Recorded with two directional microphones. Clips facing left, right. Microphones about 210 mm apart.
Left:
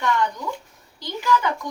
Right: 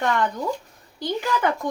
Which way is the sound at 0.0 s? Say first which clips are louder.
Right 1 dB; 50° right (ahead or behind).